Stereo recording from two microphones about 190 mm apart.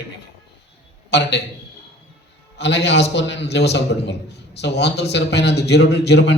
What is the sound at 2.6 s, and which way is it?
A man's voice, 65° left (ahead or behind).